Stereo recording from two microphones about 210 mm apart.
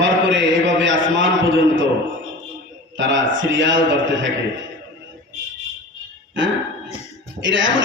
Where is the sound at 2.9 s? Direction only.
60° right (ahead or behind).